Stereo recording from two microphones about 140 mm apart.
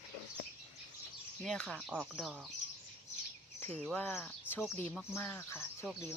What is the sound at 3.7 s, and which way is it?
Speech, 5° left (ahead or behind).